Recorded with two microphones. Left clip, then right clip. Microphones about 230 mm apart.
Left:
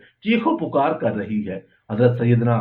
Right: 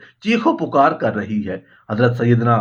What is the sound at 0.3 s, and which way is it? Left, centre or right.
Speech, right.